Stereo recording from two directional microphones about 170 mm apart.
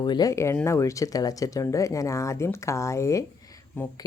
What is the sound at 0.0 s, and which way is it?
A woman's voice, 25° left (ahead or behind).